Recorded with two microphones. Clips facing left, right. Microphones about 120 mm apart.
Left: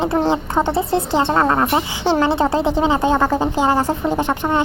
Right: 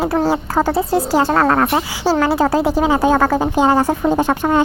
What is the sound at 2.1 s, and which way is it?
A woman's voice, 20° left (ahead or behind).